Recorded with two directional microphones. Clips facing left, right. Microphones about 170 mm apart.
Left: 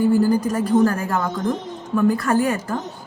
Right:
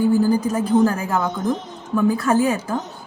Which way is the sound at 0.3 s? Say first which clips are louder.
Even; 5° right (ahead or behind).